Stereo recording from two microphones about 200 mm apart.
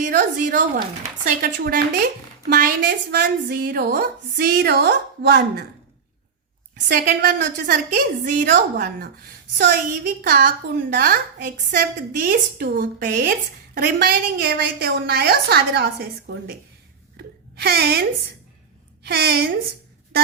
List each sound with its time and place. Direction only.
0.0 s a woman's voice: 45° right (ahead or behind)
6.8 s a woman's voice: 50° right (ahead or behind)
17.2 s a sound: 50° right (ahead or behind)
19.0 s a woman's voice: 55° right (ahead or behind)